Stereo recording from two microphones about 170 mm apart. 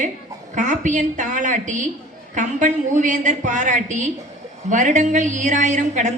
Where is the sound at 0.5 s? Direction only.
50° right (ahead or behind).